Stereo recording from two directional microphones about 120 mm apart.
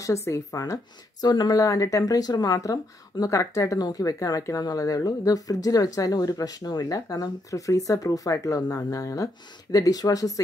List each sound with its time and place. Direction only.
0.0 s speech: 25° left (ahead or behind)